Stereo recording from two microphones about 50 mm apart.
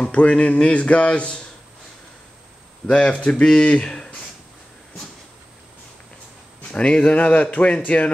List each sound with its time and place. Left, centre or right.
0.0 s speech: left
2.9 s speech: centre
6.7 s speech: left